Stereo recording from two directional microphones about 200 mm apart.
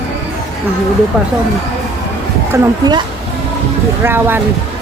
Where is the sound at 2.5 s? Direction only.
20° right (ahead or behind).